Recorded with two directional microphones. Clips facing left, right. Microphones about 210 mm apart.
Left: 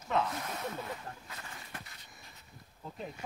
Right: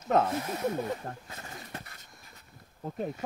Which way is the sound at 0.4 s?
30° right (ahead or behind).